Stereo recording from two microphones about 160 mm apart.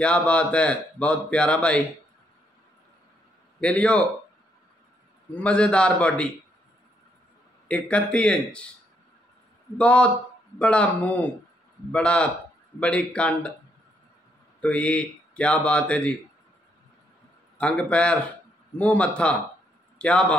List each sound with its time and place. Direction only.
0.0 s speech: 5° left (ahead or behind)
3.6 s speech: 5° left (ahead or behind)
5.3 s speech: 5° left (ahead or behind)
7.6 s speech: 5° left (ahead or behind)
9.8 s speech: 10° left (ahead or behind)
14.6 s speech: 10° left (ahead or behind)
17.6 s speech: 10° left (ahead or behind)